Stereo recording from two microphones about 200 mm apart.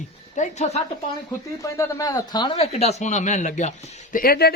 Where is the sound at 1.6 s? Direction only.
15° left (ahead or behind); by 3.7 s 35° left (ahead or behind).